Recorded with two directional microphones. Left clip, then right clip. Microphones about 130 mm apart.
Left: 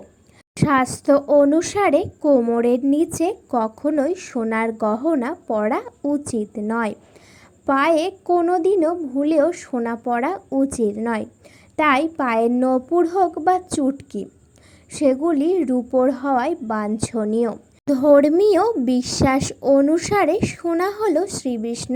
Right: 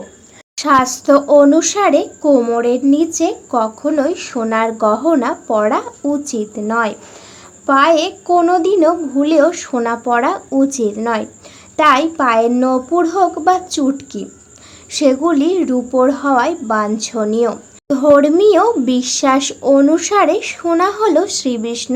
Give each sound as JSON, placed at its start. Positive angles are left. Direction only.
{"t": 0.5, "sound": "a woman's voice", "side_deg": 35}